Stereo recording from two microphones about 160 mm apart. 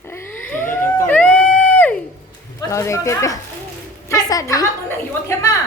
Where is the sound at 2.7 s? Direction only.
20° left (ahead or behind).